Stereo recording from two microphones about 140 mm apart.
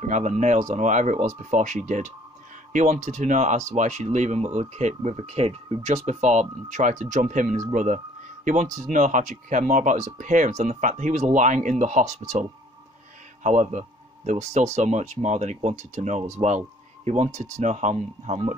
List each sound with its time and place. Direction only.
0.1 s speech: 55° right (ahead or behind)